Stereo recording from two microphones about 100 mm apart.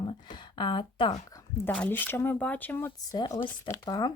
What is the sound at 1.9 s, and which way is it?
A woman's voice, 20° left (ahead or behind).